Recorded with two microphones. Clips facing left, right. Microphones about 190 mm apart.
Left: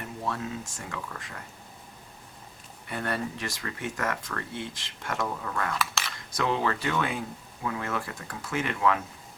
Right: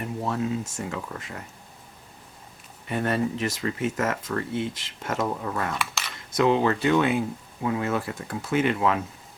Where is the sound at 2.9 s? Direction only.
20° right (ahead or behind).